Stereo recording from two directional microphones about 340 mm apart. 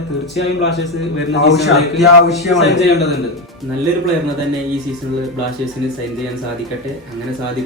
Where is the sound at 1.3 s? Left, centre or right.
Left.